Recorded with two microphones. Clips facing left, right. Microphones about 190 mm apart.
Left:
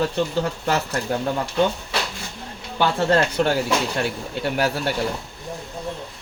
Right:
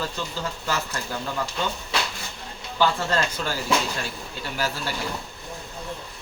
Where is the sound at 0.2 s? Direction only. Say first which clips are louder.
Left 10 dB; 65° left (ahead or behind).